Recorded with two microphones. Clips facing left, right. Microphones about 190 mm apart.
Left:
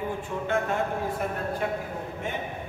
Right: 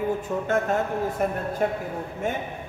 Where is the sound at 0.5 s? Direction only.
40° right (ahead or behind).